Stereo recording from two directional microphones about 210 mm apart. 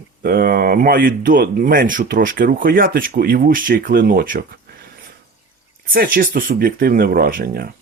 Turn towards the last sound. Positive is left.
turn(degrees=-45)  # may be behind; listen again after turning